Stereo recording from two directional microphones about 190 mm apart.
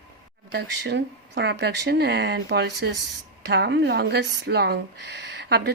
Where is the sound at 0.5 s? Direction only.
65° right (ahead or behind).